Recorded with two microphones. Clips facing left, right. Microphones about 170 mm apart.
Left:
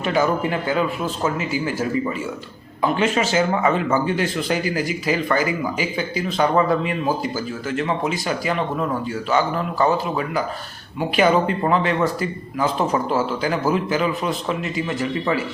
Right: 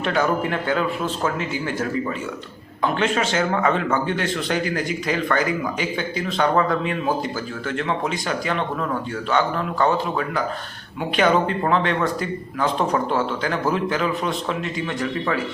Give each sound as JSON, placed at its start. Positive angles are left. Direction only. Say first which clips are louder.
{"t": 0.0, "sound": "speech", "louder": "left 1 dB", "side_deg": 5}